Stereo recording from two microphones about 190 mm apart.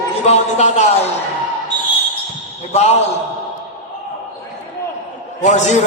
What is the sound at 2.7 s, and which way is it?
Speech, 35° left (ahead or behind).